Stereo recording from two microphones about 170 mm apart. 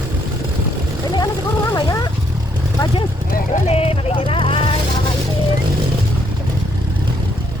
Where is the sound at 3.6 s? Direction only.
35° left (ahead or behind).